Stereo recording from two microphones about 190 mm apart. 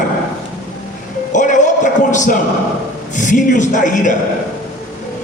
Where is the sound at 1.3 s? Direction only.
40° left (ahead or behind).